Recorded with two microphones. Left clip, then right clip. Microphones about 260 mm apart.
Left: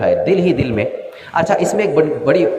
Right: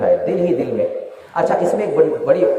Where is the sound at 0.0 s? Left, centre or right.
Left.